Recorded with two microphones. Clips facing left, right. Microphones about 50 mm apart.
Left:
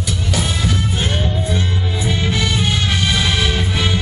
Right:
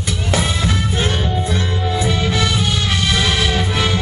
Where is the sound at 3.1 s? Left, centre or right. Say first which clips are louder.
Right 1 dB; centre.